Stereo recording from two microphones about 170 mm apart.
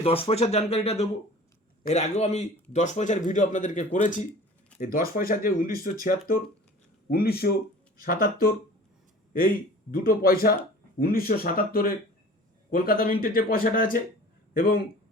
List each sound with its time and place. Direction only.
0.0 s a man's voice: 35° left (ahead or behind); by 8.5 s 60° left (ahead or behind)
9.9 s speech: 60° left (ahead or behind)